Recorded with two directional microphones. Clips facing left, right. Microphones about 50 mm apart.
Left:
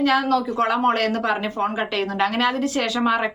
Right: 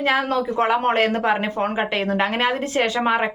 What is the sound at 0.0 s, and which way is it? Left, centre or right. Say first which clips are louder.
A woman's voice: left 1 dB; right.